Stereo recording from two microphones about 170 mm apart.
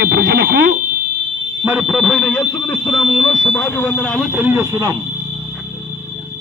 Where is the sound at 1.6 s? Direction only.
5° right (ahead or behind).